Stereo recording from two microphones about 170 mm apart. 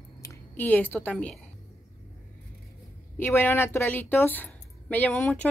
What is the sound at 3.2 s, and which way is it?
Speech, 15° left (ahead or behind).